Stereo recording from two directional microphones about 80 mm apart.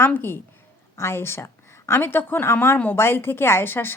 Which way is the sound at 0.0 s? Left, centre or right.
Left.